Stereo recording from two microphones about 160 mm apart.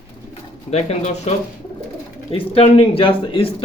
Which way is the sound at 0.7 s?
45° left (ahead or behind).